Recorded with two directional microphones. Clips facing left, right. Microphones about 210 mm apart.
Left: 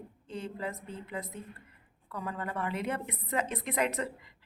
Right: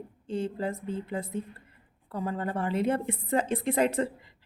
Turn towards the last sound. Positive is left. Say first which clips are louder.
# right 6 dB
turn(degrees=-30)  # may be behind; listen again after turning